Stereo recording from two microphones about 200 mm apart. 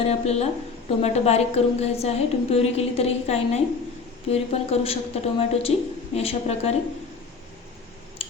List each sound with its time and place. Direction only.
0.0 s a woman's voice: 30° left (ahead or behind)
8.2 s scissors: 30° left (ahead or behind)